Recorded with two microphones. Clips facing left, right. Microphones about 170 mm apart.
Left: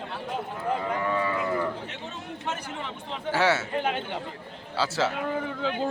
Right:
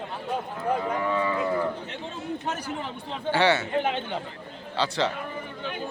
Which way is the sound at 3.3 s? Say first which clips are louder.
Right 2 dB; centre (ahead or behind).